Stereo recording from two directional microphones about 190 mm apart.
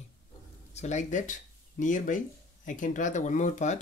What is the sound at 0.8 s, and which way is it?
Speech, 40° left (ahead or behind).